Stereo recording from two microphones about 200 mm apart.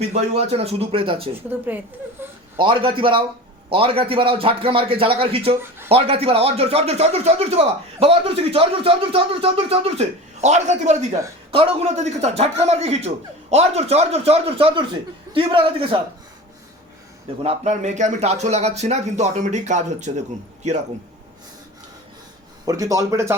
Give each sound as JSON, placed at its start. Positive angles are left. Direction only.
{"t": 0.1, "sound": "speech", "side_deg": -30}
{"t": 1.4, "sound": "speech", "side_deg": -10}
{"t": 2.6, "sound": "speech", "side_deg": -25}
{"t": 17.4, "sound": "speech", "side_deg": -30}
{"t": 22.6, "sound": "speech", "side_deg": -15}